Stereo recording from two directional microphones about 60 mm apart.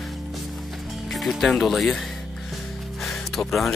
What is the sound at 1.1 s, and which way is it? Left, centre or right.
Speech, centre.